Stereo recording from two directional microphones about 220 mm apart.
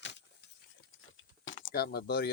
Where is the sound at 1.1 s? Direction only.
60° left (ahead or behind).